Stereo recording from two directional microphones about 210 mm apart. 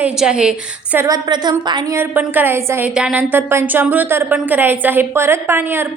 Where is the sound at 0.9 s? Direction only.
15° right (ahead or behind).